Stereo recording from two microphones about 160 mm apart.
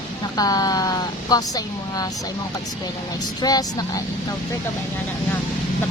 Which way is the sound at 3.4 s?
25° left (ahead or behind).